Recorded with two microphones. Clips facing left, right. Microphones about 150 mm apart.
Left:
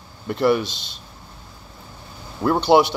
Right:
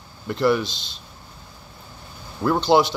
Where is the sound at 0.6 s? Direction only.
60° left (ahead or behind).